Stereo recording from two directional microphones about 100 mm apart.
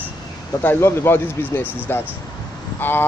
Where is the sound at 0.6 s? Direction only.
20° left (ahead or behind).